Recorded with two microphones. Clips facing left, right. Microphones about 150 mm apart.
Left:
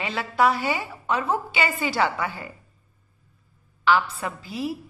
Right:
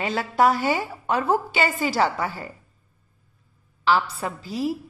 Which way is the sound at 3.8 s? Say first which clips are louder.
Even; 35° right (ahead or behind).